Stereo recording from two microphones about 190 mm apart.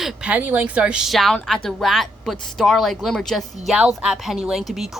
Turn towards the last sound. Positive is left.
turn(degrees=0)  # may be behind; listen again after turning